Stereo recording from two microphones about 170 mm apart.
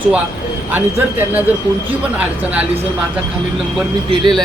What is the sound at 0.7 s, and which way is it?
Speech, 10° right (ahead or behind).